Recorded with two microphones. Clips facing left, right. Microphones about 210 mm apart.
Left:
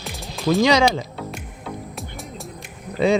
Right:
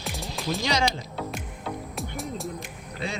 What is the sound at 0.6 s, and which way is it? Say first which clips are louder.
Speech: left 10 dB; 90° left.